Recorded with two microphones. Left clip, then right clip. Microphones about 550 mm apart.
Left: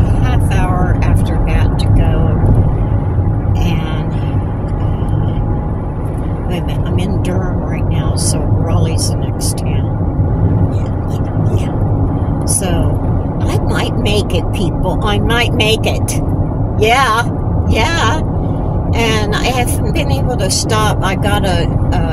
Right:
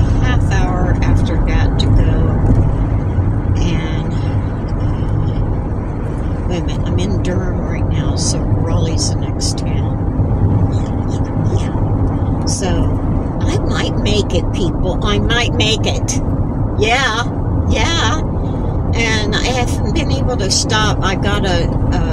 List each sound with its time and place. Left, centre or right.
13.5 s vehicle: left
16.8 s a sound: left
17.7 s vehicle: left